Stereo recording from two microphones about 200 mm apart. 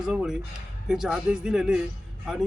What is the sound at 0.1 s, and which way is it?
A man's voice, 5° right (ahead or behind).